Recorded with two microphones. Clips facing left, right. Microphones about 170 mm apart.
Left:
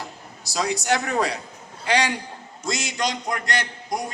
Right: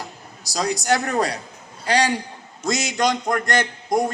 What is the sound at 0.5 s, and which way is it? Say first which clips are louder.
A man's voice: right 2 dB; 40° right (ahead or behind).